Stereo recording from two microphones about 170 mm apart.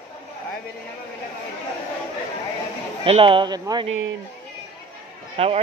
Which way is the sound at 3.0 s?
30° right (ahead or behind).